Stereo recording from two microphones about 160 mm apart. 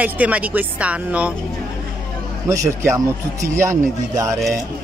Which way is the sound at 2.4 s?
20° right (ahead or behind).